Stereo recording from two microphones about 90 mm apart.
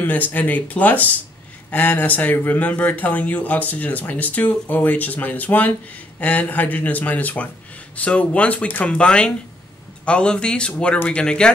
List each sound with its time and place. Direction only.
0.0 s speech: 20° left (ahead or behind)